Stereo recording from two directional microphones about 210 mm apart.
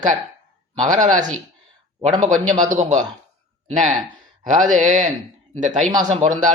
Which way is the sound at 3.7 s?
35° right (ahead or behind).